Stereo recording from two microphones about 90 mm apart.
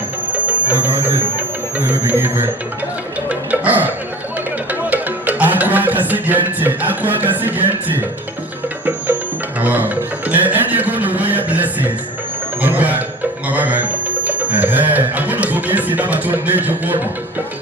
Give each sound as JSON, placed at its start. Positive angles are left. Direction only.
{"t": 0.7, "sound": "speech", "side_deg": -20}
{"t": 3.2, "sound": "music", "side_deg": -15}
{"t": 9.6, "sound": "a sound", "side_deg": -20}
{"t": 12.6, "sound": "music", "side_deg": -20}